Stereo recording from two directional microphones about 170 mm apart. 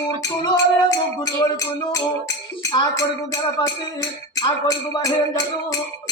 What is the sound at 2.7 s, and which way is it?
Music, 20° left (ahead or behind).